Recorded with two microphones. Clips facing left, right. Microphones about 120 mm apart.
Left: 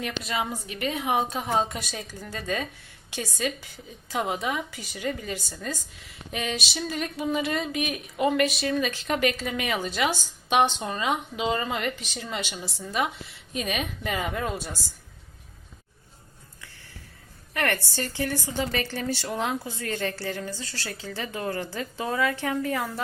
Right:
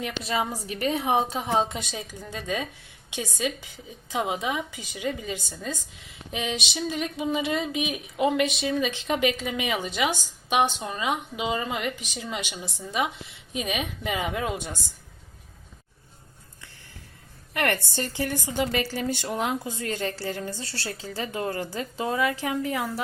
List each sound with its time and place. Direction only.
0.0 s a woman's voice: 30° right (ahead or behind)
17.9 s a woman's voice: 15° right (ahead or behind)